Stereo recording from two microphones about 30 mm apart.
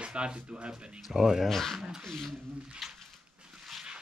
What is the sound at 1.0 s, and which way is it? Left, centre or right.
Speech, centre.